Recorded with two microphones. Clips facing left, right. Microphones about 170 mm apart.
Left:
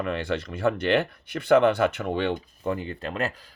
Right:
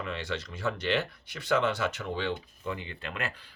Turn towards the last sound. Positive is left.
turn(degrees=40)  # may be behind; listen again after turning